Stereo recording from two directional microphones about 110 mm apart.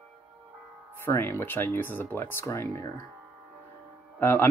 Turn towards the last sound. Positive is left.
turn(degrees=20)  # may be behind; listen again after turning